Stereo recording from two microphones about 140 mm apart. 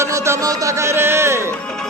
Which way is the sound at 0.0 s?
20° right (ahead or behind).